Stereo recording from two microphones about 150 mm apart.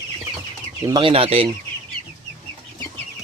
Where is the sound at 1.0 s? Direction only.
40° right (ahead or behind).